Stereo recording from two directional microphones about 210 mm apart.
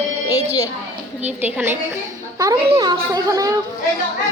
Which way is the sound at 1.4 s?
10° right (ahead or behind).